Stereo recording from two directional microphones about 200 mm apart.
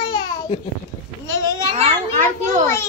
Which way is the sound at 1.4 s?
15° left (ahead or behind).